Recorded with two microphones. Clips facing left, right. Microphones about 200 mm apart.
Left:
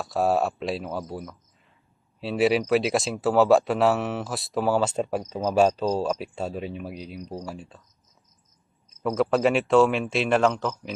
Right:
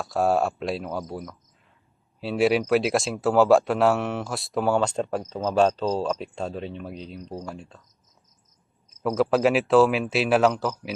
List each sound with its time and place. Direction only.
0.0 s speech: centre (ahead or behind)
9.0 s speech: 5° right (ahead or behind)